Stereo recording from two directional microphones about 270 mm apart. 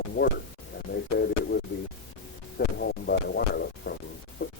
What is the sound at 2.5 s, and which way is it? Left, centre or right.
Hum, left.